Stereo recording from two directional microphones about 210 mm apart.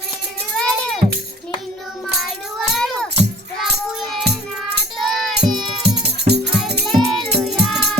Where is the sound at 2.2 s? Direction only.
Centre (ahead or behind).